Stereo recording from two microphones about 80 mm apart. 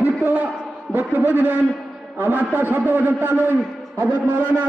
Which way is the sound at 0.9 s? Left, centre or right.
Right.